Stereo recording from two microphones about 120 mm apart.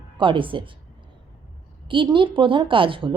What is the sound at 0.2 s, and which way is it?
Speech, 45° right (ahead or behind).